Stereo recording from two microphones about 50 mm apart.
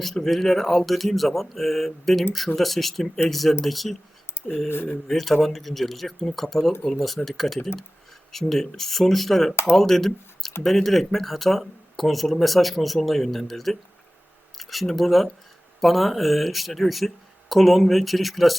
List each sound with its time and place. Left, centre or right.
0.0 s speech: centre
4.7 s speech: left
5.0 s speech: centre